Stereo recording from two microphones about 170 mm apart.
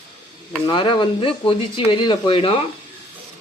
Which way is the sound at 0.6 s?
30° left (ahead or behind).